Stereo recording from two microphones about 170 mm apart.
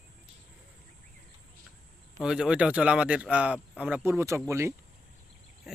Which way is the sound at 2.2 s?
5° right (ahead or behind).